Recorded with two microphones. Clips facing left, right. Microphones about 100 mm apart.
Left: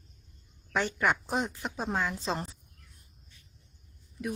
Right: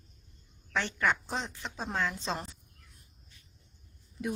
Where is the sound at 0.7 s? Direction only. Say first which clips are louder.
Left 2 dB; 10° left (ahead or behind).